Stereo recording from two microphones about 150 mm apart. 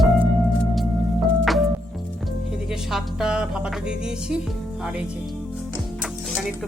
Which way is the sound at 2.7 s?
5° right (ahead or behind).